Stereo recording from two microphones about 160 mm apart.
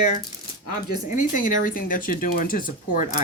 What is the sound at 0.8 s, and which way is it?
Speech, 55° left (ahead or behind).